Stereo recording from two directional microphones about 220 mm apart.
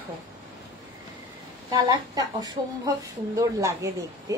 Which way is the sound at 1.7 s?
20° right (ahead or behind).